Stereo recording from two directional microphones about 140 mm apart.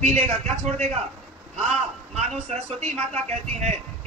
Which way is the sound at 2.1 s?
55° right (ahead or behind).